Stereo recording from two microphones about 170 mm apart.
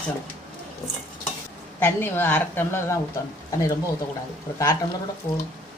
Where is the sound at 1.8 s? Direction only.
10° left (ahead or behind).